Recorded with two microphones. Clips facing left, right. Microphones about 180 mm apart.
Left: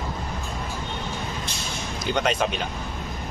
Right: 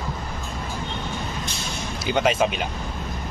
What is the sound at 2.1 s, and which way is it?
Speech, 5° right (ahead or behind).